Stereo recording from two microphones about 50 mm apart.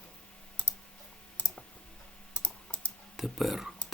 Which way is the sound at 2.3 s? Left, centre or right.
Left.